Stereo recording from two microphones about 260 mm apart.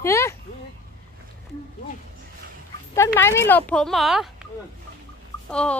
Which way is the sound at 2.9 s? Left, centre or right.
Centre.